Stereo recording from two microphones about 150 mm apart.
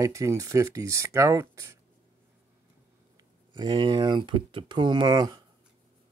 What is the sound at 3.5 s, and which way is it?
Speech, 30° right (ahead or behind).